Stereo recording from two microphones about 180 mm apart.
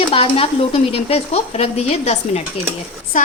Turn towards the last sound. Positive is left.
turn(degrees=45)  # may be behind; listen again after turning